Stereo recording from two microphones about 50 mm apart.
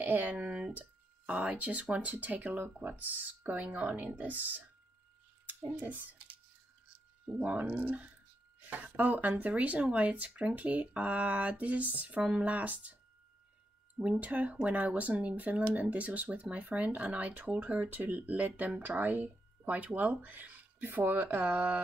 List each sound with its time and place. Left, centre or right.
0.0 s a sound: right
0.5 s a sound: right
1.3 s speech: right
2.5 s speech: right
2.9 s speech: right
7.3 s a woman's voice: right
13.9 s speech: right